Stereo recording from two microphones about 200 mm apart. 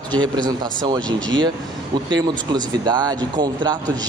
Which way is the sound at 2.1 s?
20° right (ahead or behind).